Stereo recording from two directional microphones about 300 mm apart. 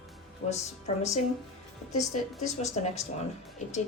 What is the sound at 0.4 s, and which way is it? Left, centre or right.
Speech, left.